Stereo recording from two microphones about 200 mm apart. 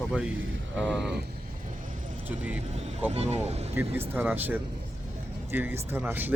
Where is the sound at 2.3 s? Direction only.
5° right (ahead or behind).